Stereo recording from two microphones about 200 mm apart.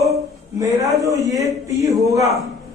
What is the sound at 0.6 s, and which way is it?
A man's voice, 15° right (ahead or behind).